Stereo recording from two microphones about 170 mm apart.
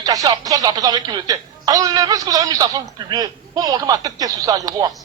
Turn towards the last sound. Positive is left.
turn(degrees=-20)  # may be behind; listen again after turning